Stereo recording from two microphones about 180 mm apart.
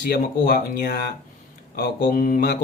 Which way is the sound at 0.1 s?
60° left (ahead or behind).